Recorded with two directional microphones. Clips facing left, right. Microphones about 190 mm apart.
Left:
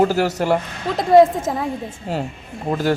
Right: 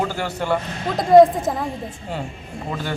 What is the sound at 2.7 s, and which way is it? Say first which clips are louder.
Speech: left 9 dB; 40° left (ahead or behind).